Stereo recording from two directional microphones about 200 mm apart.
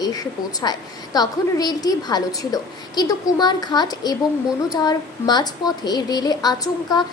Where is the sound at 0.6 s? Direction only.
20° left (ahead or behind).